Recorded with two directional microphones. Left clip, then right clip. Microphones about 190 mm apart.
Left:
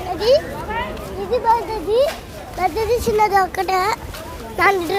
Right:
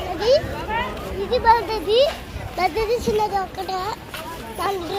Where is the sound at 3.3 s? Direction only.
40° left (ahead or behind).